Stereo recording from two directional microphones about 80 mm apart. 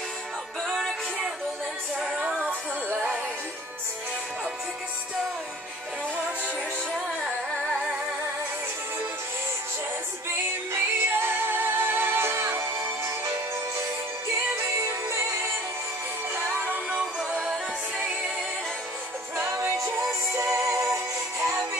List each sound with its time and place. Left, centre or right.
0.7 s music: centre
2.0 s music: centre
10.7 s music: right
14.9 s music: right
16.3 s music: right
19.3 s music: right